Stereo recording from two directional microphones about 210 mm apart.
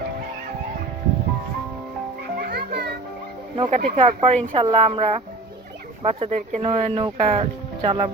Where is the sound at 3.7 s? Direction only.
35° right (ahead or behind).